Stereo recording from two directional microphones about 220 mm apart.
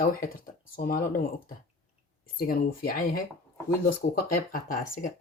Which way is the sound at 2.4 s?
40° left (ahead or behind).